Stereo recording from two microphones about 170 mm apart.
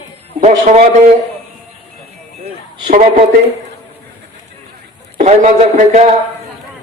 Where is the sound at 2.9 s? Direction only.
50° right (ahead or behind).